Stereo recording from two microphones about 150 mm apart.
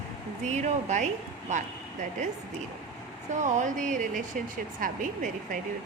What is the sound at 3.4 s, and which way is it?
Speech, 55° right (ahead or behind).